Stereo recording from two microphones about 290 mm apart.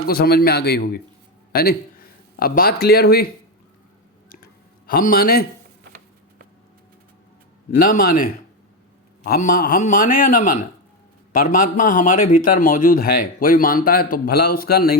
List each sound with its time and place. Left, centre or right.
0.1 s speech: left
4.9 s speech: left
7.7 s a man's voice: left